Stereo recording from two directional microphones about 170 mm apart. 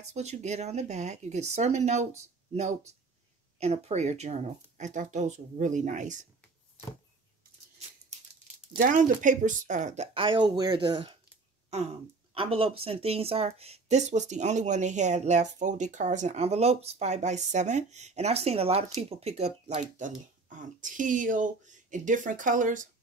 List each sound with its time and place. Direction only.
0.0 s speech: 40° right (ahead or behind)
8.7 s speech: 50° right (ahead or behind)
10.1 s speech: 30° right (ahead or behind)
12.4 s speech: 35° right (ahead or behind); by 22.8 s 50° right (ahead or behind)